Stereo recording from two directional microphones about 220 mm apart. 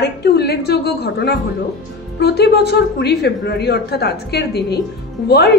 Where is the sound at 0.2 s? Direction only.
45° left (ahead or behind).